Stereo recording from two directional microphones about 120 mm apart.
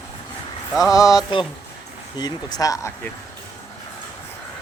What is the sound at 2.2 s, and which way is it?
Speech, 35° left (ahead or behind).